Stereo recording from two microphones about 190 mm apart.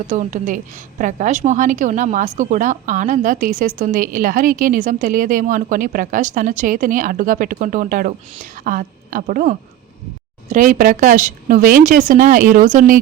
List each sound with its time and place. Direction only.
0.1 s a woman's voice: 40° right (ahead or behind)